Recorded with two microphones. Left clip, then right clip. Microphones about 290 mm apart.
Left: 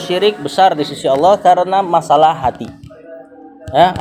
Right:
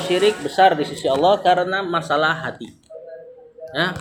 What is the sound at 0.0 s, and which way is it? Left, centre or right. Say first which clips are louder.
Speech: left 3 dB; left.